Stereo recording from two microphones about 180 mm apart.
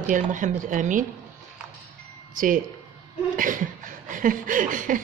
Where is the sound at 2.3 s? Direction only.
50° right (ahead or behind).